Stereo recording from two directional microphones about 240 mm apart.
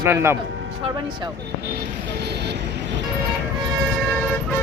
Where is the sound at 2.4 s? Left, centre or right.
Right.